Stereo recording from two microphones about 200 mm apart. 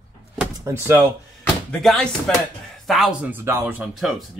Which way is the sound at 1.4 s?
5° left (ahead or behind).